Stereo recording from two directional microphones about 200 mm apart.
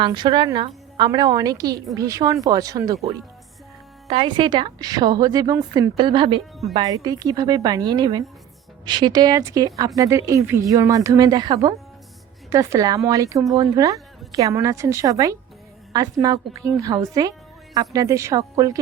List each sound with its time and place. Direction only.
0.0 s a woman's voice: 25° right (ahead or behind)
4.1 s a woman's voice: 25° right (ahead or behind)